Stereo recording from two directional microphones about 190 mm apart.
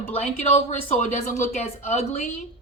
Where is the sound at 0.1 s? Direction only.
35° left (ahead or behind).